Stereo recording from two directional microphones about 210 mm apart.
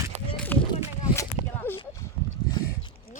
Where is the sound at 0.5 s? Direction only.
10° left (ahead or behind).